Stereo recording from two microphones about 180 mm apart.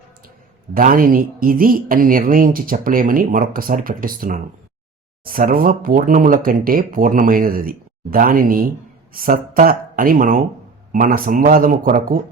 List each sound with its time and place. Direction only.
0.7 s speech: 50° right (ahead or behind)